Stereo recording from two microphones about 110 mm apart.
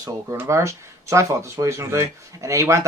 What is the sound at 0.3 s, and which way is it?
Speech, 25° right (ahead or behind).